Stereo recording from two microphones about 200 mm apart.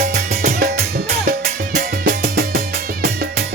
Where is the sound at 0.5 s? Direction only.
50° right (ahead or behind).